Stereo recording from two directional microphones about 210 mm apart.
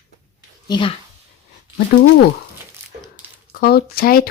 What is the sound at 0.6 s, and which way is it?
Speech, 20° left (ahead or behind).